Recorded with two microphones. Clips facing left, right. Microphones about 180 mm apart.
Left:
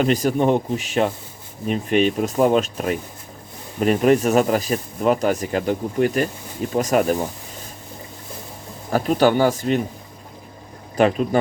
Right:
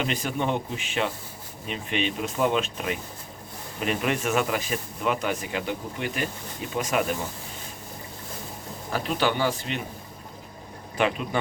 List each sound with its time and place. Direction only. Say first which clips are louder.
0.0 s speech: left 9 dB; 40° left (ahead or behind)
8.9 s speech: left 9 dB; 45° left (ahead or behind)
10.9 s speech: left 8 dB; 40° left (ahead or behind)